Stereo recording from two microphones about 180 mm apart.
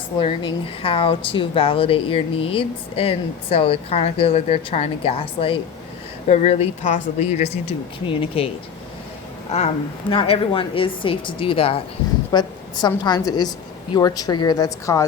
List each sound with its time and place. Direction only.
0.3 s speech: 30° left (ahead or behind)
9.5 s a woman's voice: 35° left (ahead or behind); by 15.0 s 20° left (ahead or behind)